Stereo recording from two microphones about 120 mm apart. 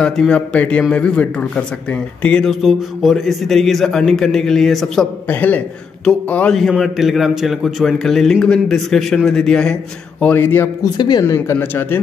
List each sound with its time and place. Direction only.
0.0 s a man's voice: 5° left (ahead or behind)
5.3 s a man's voice: 15° left (ahead or behind)
10.2 s speech: 20° left (ahead or behind)
10.8 s speech: 35° left (ahead or behind)
11.2 s speech: 20° left (ahead or behind)